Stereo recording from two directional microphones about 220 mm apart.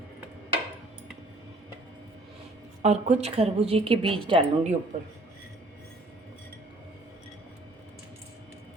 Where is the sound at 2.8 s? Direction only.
30° right (ahead or behind).